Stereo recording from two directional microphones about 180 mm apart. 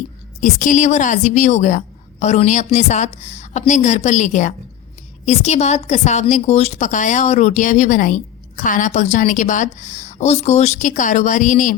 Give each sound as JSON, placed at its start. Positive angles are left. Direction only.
{"t": 0.3, "sound": "a woman's voice", "side_deg": 45}